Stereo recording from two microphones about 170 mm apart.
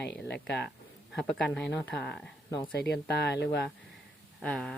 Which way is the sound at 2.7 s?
75° left (ahead or behind).